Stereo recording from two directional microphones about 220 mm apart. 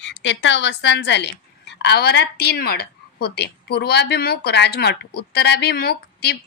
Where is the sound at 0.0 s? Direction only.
55° left (ahead or behind).